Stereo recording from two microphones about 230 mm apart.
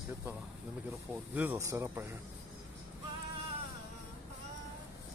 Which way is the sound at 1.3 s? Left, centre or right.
Centre.